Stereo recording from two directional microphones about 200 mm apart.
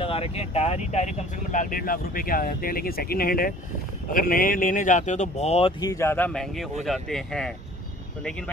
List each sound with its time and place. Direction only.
0.0 s speech: 30° left (ahead or behind); by 8.5 s 5° left (ahead or behind)